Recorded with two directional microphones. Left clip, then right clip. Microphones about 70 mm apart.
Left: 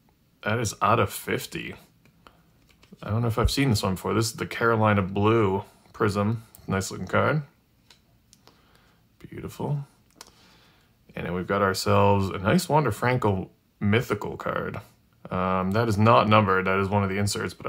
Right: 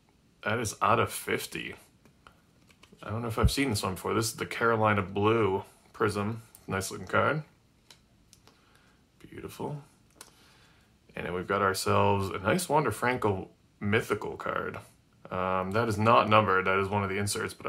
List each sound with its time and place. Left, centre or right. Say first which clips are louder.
0.4 s speech: left 3 dB; left
3.1 s speech: left 4 dB; left
9.2 s a sound: left 4 dB; left
11.1 s speech: left 4 dB; left